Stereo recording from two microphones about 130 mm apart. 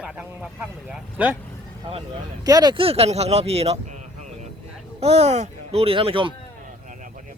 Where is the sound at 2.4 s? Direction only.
30° right (ahead or behind).